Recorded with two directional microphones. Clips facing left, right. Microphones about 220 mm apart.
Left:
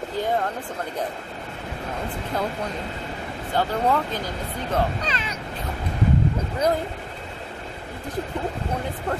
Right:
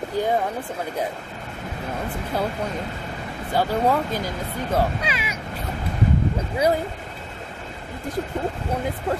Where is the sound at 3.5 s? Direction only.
10° right (ahead or behind).